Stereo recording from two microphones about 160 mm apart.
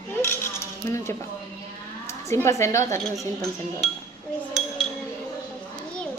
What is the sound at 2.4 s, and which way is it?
Dishes, 20° left (ahead or behind).